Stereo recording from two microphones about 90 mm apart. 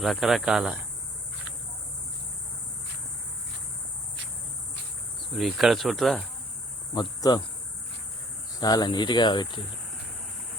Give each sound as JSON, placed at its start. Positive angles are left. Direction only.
{"t": 0.0, "sound": "speech", "side_deg": 0}
{"t": 5.3, "sound": "speech", "side_deg": 0}
{"t": 7.2, "sound": "speech", "side_deg": 50}
{"t": 8.5, "sound": "speech", "side_deg": 45}